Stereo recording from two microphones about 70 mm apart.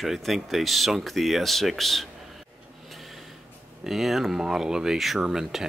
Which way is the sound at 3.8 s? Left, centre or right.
Centre.